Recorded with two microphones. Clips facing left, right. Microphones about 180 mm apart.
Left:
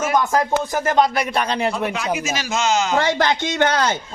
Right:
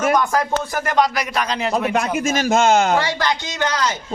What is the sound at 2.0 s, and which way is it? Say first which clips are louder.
A man's voice: right 4 dB; 50° right (ahead or behind).